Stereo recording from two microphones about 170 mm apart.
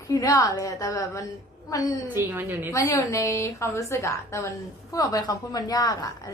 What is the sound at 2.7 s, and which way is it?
A woman's voice, 20° left (ahead or behind).